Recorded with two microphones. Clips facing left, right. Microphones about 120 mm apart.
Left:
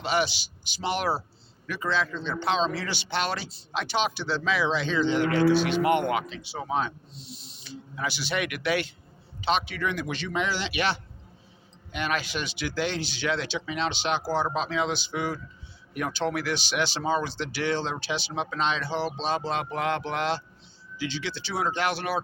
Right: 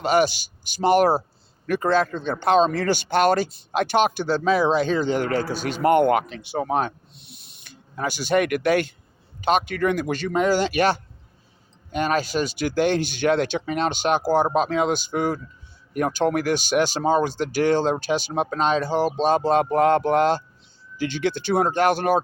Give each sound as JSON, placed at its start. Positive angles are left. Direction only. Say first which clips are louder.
{"t": 0.0, "sound": "speech", "louder": "right 7 dB", "side_deg": -45}